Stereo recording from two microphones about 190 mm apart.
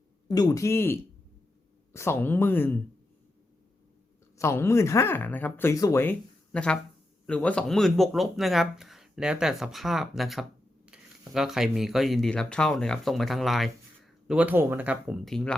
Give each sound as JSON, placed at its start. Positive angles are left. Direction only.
{"t": 0.3, "sound": "speech", "side_deg": 20}
{"t": 4.4, "sound": "speech", "side_deg": 15}